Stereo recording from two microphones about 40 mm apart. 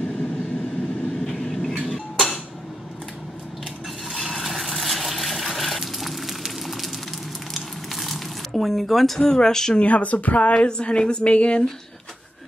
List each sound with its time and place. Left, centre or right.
1.2 s vehicle: centre
1.7 s a sound: centre
4.1 s water: centre
6.6 s fire: centre
7.5 s crumpling: centre
9.2 s speech: centre
9.8 s speech: left
10.5 s a woman's voice: left